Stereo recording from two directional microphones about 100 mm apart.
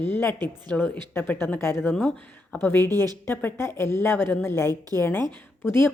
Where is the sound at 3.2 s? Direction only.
20° left (ahead or behind).